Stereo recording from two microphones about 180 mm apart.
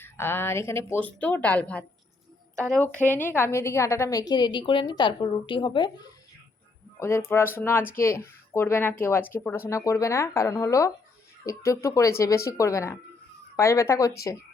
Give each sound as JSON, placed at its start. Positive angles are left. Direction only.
{"t": 0.0, "sound": "a woman's voice", "side_deg": 10}
{"t": 7.0, "sound": "speech", "side_deg": 15}